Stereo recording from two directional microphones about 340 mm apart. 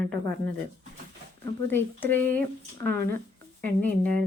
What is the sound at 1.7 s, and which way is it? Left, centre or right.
Speech, centre.